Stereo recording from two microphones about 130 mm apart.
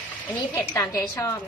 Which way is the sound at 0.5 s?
25° left (ahead or behind).